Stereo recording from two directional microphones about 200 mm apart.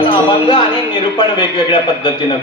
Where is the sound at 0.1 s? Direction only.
25° left (ahead or behind).